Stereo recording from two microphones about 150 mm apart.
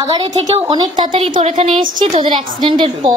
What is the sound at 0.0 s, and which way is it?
A woman's voice, 30° right (ahead or behind).